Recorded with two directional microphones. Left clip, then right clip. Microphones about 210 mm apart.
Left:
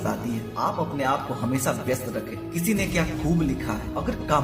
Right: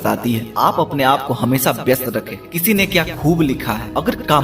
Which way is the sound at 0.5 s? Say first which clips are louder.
Right 11 dB; 40° right (ahead or behind).